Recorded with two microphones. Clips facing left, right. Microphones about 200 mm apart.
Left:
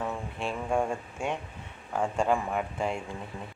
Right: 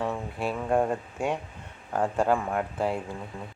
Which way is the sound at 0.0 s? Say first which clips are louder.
Right 3 dB; 5° right (ahead or behind).